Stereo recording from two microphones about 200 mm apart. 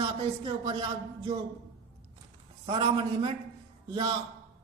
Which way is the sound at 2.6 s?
25° right (ahead or behind).